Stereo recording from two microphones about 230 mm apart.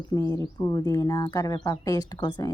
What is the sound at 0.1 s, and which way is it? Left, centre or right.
Speech, centre.